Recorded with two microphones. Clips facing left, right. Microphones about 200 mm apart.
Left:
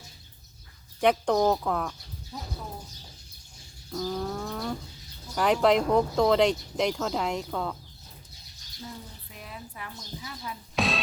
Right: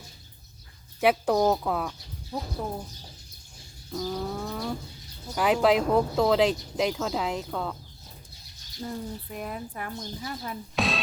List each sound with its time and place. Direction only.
0.9 s speech: 5° right (ahead or behind)
2.3 s speech: 60° right (ahead or behind)
3.9 s speech: 5° right (ahead or behind)
8.8 s speech: 50° right (ahead or behind)
10.8 s music: centre (ahead or behind)